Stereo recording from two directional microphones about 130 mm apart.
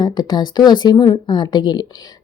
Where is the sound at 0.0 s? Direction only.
35° left (ahead or behind).